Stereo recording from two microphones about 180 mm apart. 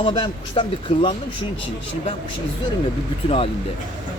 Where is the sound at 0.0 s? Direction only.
25° left (ahead or behind).